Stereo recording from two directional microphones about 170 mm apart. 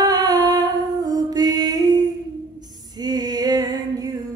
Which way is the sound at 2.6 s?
25° right (ahead or behind).